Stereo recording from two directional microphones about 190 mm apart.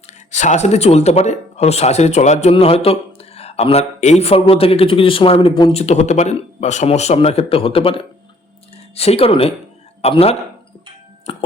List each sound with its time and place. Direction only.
0.3 s speech: 40° left (ahead or behind)